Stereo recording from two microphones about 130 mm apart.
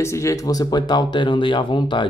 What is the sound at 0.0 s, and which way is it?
Speech, 20° left (ahead or behind).